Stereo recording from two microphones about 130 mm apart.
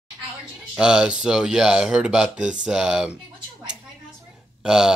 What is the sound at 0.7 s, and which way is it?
Speech, 5° right (ahead or behind).